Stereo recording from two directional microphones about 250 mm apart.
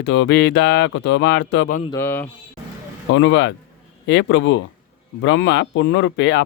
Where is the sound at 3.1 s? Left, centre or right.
Left.